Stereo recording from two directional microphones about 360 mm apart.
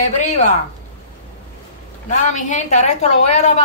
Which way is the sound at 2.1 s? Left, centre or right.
Centre.